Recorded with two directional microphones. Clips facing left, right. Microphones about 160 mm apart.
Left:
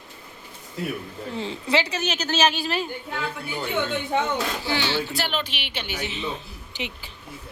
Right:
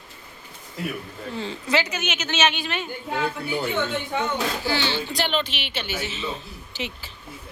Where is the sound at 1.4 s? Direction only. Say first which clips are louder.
Even; 30° left (ahead or behind).